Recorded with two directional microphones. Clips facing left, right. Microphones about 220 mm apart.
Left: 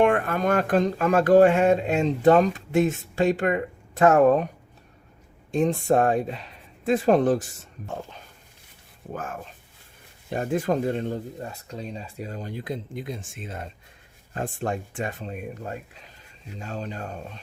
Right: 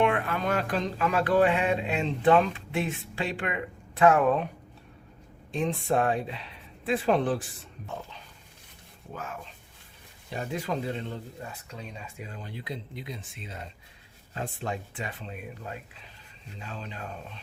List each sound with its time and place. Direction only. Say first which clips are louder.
0.0 s speech: left 5 dB; 45° left (ahead or behind)
5.5 s speech: left 6 dB; 45° left (ahead or behind)